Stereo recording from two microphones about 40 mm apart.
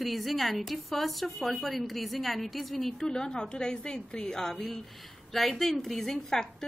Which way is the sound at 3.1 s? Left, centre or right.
Centre.